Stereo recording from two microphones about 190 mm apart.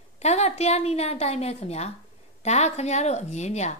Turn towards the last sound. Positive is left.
turn(degrees=35)  # may be behind; listen again after turning